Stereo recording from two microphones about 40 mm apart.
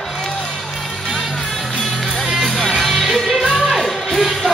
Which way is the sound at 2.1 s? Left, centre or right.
Centre.